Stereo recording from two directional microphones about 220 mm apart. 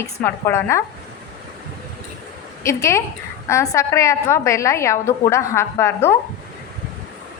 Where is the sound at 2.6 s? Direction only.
10° left (ahead or behind).